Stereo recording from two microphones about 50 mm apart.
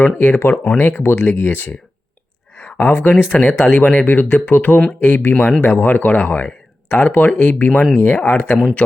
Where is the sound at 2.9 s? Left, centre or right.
Left.